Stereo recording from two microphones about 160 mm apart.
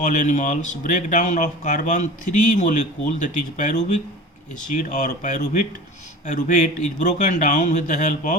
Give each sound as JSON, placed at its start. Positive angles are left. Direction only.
{"t": 0.0, "sound": "speech", "side_deg": 50}